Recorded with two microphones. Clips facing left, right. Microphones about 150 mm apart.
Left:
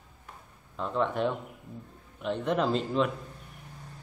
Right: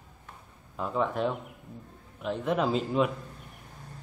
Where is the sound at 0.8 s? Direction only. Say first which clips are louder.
Even; 5° right (ahead or behind).